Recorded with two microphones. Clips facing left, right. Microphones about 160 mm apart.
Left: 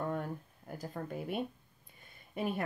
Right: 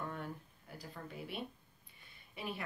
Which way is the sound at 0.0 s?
45° left (ahead or behind).